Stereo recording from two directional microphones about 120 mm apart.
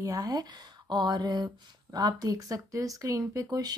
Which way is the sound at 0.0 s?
30° right (ahead or behind).